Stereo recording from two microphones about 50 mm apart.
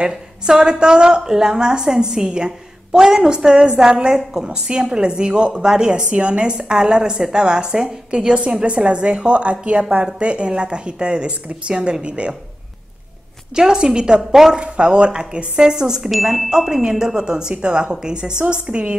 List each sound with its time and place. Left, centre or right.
0.0 s a woman's voice: centre
13.6 s a woman's voice: centre
16.1 s a woman's voice: centre; by 18.9 s right